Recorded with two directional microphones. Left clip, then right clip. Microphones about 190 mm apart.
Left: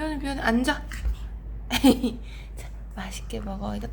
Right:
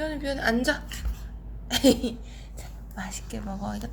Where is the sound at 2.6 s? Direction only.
10° left (ahead or behind).